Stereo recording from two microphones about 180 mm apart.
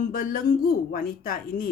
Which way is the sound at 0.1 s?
50° left (ahead or behind).